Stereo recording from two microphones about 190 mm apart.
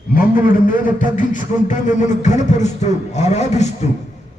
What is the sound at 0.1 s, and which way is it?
A man's voice, 50° left (ahead or behind).